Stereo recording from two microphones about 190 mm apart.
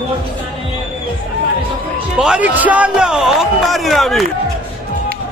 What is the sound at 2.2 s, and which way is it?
A man's voice, 5° right (ahead or behind).